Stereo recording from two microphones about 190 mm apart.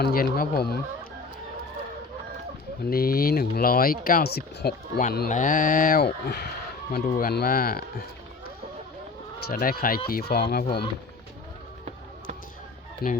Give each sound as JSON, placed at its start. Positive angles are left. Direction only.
{"t": 0.0, "sound": "speech", "side_deg": 50}
{"t": 2.9, "sound": "speech", "side_deg": 50}
{"t": 9.5, "sound": "speech", "side_deg": 50}
{"t": 13.0, "sound": "speech", "side_deg": 55}